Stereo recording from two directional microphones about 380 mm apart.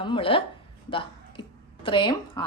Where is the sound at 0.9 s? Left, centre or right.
Centre.